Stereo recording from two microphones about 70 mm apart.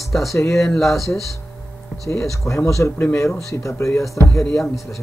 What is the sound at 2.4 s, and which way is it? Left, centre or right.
Speech, left.